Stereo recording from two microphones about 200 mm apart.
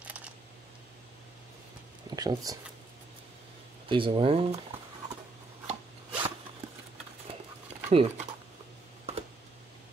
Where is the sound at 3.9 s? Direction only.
25° right (ahead or behind).